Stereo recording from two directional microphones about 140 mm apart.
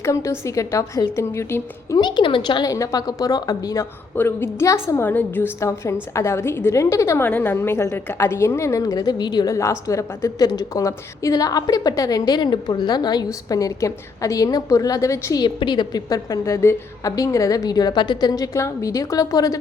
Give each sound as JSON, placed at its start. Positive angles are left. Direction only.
{"t": 0.0, "sound": "a woman's voice", "side_deg": 20}
{"t": 2.0, "sound": "a woman's voice", "side_deg": 35}